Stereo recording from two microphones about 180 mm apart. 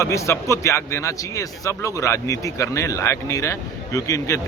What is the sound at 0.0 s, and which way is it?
Speech, 15° left (ahead or behind).